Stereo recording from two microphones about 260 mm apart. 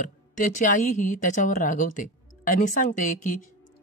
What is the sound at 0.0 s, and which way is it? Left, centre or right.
Speech, left.